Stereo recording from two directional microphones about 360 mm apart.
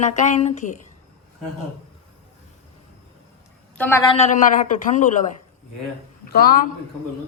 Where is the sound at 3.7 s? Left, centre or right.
Centre.